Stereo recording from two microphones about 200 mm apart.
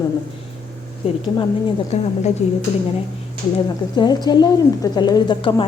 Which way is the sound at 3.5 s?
20° left (ahead or behind).